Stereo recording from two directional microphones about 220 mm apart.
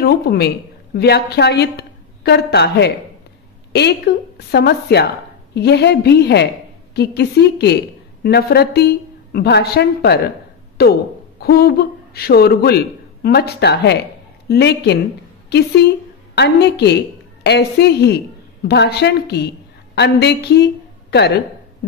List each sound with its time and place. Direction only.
0.0 s a woman's voice: 45° left (ahead or behind)